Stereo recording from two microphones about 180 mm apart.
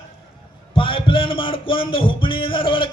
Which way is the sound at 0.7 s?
30° left (ahead or behind).